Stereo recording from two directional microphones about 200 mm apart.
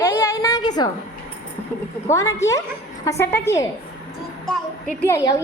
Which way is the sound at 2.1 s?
15° left (ahead or behind).